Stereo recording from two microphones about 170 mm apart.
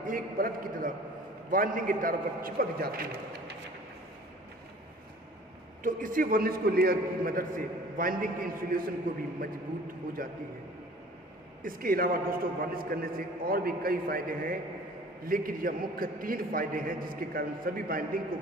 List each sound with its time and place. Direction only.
0.0 s a man's voice: 55° right (ahead or behind)
5.8 s a man's voice: 50° right (ahead or behind)
11.6 s a man's voice: 55° right (ahead or behind)